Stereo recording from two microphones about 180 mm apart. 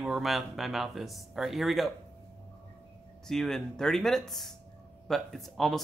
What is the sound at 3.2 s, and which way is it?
Speech, centre (ahead or behind).